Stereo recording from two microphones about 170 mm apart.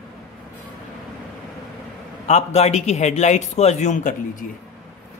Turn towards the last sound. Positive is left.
turn(degrees=50)  # may be behind; listen again after turning